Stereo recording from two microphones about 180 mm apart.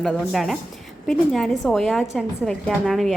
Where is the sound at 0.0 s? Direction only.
Centre (ahead or behind).